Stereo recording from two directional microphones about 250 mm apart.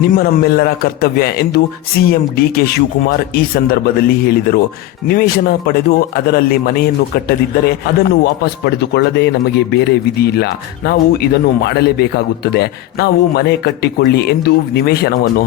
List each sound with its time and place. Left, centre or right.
0.0 s a man's voice: left